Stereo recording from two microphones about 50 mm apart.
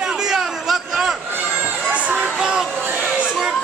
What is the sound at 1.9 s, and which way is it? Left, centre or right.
Speech, right.